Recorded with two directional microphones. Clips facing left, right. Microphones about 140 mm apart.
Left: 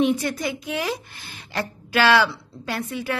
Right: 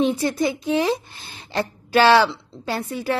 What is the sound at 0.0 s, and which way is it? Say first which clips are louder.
A woman's voice: right 2 dB; 30° right (ahead or behind).